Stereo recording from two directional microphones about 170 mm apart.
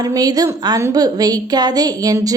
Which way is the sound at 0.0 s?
20° right (ahead or behind).